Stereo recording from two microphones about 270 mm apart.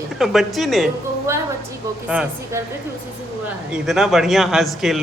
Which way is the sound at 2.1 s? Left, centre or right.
Centre.